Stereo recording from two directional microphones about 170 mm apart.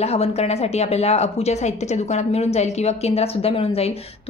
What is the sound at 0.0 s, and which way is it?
A woman's voice, 35° left (ahead or behind).